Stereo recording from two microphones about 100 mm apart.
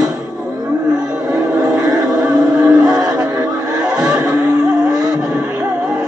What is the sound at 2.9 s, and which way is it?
Music, 40° right (ahead or behind).